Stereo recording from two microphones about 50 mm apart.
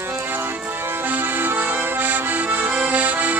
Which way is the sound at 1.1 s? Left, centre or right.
Right.